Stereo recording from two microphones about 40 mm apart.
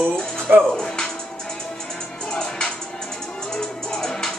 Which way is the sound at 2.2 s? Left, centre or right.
Centre.